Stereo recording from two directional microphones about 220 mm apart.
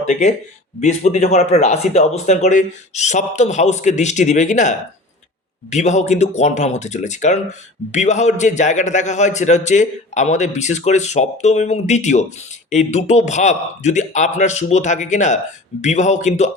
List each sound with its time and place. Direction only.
0.1 s a man's voice: 30° left (ahead or behind)
5.7 s a man's voice: 30° left (ahead or behind)